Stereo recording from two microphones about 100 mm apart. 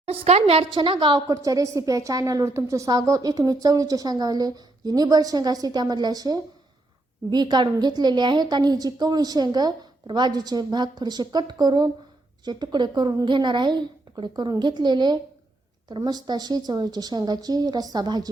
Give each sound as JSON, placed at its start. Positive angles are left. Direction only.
{"t": 0.0, "sound": "a woman's voice", "side_deg": -90}
{"t": 0.7, "sound": "a woman's voice", "side_deg": -55}
{"t": 1.3, "sound": "a woman's voice", "side_deg": -35}